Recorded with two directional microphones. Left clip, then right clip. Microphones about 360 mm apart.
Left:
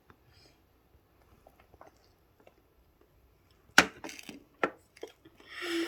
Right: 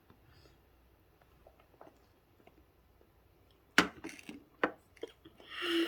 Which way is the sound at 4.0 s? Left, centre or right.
Centre.